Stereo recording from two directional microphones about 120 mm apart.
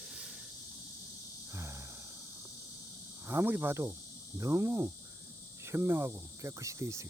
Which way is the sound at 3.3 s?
15° right (ahead or behind).